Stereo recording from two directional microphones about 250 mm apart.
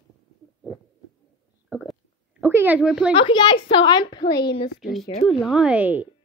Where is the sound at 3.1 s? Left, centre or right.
Centre.